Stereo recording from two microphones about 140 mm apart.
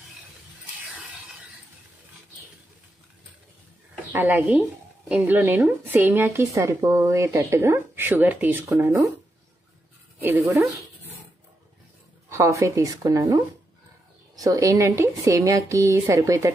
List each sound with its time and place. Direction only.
4.1 s speech: 15° right (ahead or behind)
10.1 s speech: 15° right (ahead or behind)
12.3 s a woman's voice: 20° right (ahead or behind)